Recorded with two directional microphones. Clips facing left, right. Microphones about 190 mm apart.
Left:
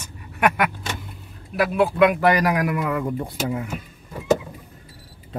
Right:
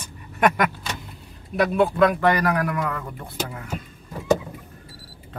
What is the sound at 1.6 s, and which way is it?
A man's voice, 5° left (ahead or behind).